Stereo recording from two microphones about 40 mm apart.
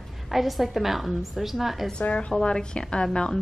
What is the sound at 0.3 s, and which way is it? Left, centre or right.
A man's voice, centre.